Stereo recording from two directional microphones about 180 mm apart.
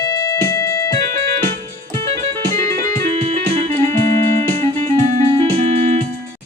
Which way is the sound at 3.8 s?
15° left (ahead or behind).